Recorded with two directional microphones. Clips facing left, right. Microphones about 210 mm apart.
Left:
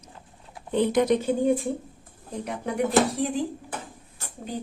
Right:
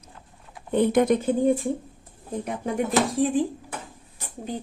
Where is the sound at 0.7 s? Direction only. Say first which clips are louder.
Right 2 dB; 55° right (ahead or behind).